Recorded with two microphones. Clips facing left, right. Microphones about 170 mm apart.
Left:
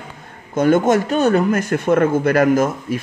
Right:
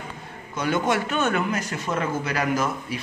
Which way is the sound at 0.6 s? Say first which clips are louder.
Left 9 dB; 50° left (ahead or behind).